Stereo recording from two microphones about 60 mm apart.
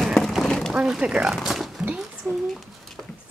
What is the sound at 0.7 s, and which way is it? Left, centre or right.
Speech, centre.